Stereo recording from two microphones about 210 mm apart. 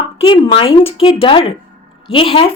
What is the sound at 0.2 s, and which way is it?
A woman's voice, 25° left (ahead or behind).